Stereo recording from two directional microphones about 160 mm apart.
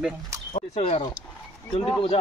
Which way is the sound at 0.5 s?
40° left (ahead or behind).